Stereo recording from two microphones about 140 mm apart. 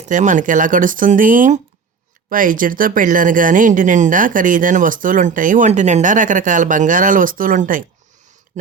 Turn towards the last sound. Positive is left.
turn(degrees=-70)  # may be behind; listen again after turning